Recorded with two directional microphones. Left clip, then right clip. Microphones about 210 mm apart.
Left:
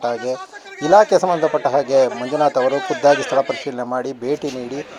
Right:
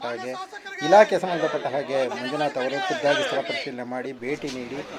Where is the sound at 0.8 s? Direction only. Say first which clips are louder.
Left 4 dB; 5° left (ahead or behind).